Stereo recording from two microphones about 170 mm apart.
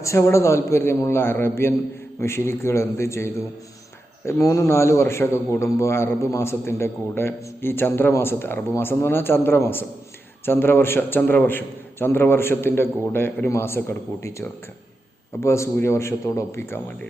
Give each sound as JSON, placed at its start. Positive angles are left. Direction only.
{"t": 0.0, "sound": "a man's voice", "side_deg": 15}